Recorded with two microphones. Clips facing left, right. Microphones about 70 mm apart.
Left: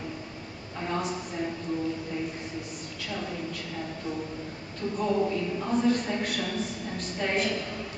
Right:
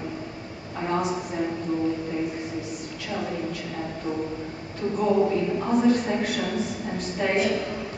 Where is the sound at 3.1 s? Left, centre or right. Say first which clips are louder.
Right 5 dB; centre.